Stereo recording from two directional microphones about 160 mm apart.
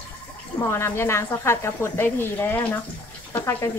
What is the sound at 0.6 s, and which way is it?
A woman's voice, 15° left (ahead or behind).